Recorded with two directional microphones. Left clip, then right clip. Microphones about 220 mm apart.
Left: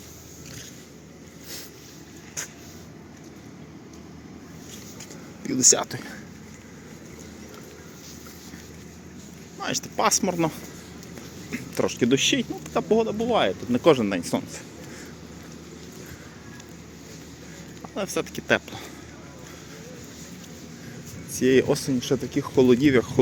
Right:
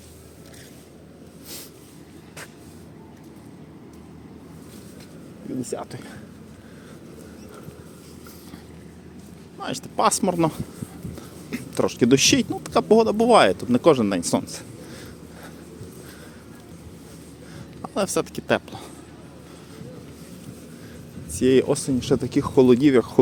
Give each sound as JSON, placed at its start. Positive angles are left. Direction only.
{"t": 5.5, "sound": "speech", "side_deg": 10}
{"t": 9.6, "sound": "speech", "side_deg": -10}
{"t": 13.7, "sound": "speech", "side_deg": -20}
{"t": 17.8, "sound": "speech", "side_deg": -25}
{"t": 21.3, "sound": "speech", "side_deg": -15}